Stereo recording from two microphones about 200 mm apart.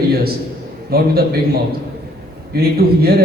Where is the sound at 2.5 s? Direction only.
50° right (ahead or behind).